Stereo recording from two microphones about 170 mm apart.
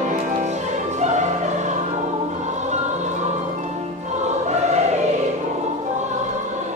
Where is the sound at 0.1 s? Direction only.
45° right (ahead or behind).